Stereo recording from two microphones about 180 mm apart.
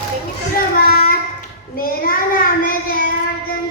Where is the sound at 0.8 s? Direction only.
55° left (ahead or behind).